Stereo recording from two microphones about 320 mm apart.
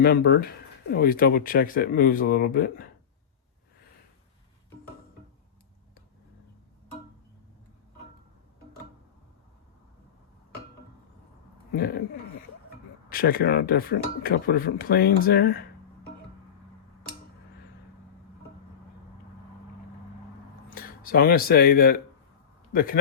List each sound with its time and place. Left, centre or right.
0.0 s speech: left
11.7 s speech: left
13.1 s speech: left
20.7 s a man's voice: left